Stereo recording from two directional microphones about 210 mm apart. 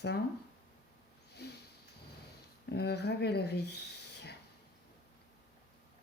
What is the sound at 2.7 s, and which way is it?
Speech, 50° left (ahead or behind).